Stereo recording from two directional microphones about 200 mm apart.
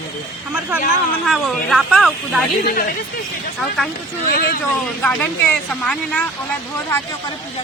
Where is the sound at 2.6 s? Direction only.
50° left (ahead or behind).